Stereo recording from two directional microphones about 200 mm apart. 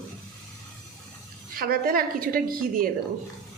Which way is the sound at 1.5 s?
45° right (ahead or behind).